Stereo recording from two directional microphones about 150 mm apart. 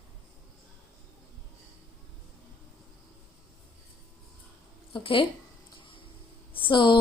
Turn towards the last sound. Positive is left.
turn(degrees=30)  # may be behind; listen again after turning